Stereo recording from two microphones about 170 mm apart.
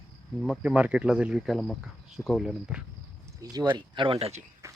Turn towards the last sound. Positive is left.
turn(degrees=-40)  # may be behind; listen again after turning